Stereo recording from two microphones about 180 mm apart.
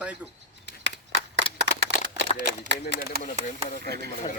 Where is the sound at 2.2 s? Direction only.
40° left (ahead or behind).